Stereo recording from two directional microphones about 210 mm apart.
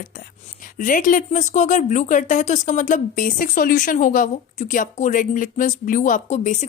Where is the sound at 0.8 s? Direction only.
40° left (ahead or behind).